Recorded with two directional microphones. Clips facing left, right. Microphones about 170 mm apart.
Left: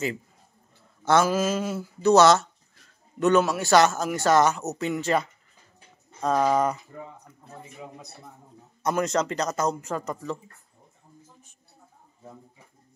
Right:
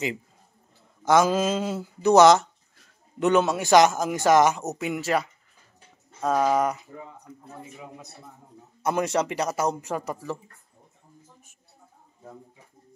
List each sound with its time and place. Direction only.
1.0 s speech: 15° right (ahead or behind)
8.8 s speech: 10° right (ahead or behind)